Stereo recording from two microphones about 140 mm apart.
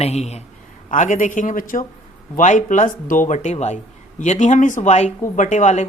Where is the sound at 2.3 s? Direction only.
60° left (ahead or behind).